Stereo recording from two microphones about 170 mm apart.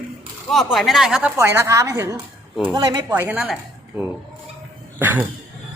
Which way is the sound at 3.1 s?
10° right (ahead or behind).